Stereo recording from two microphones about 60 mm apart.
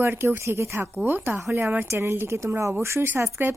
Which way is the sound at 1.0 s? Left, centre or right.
Right.